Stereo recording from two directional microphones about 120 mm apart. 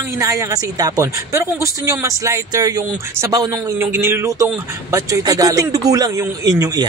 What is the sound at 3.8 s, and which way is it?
Speech, 20° right (ahead or behind).